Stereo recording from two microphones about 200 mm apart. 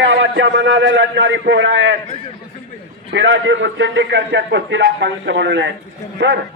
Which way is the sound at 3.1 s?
65° right (ahead or behind).